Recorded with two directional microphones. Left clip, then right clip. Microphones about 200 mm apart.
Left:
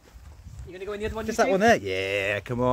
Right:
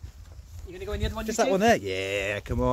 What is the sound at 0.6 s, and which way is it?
Speech, 45° right (ahead or behind).